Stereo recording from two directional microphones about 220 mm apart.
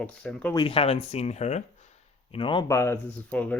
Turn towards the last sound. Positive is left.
turn(degrees=5)  # may be behind; listen again after turning